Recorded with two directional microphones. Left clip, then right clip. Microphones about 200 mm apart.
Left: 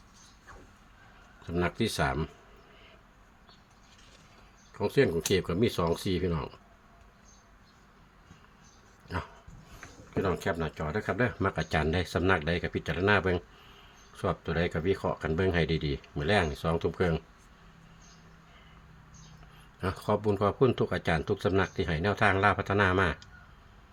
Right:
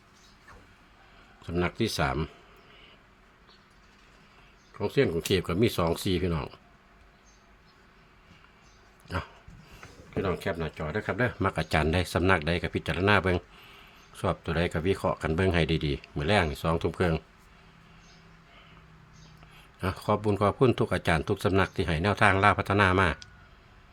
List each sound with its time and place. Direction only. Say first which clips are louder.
1.5 s speech: right 1 dB; 5° right (ahead or behind)
4.8 s speech: even; centre (ahead or behind)
9.0 s dog: right 2 dB; 10° right (ahead or behind)
10.2 s speech: even; 5° left (ahead or behind); by 17.2 s 15° right (ahead or behind)
19.8 s speech: right 1 dB; 10° right (ahead or behind)